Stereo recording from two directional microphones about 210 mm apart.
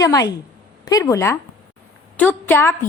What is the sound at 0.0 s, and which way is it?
A woman's voice, 15° left (ahead or behind).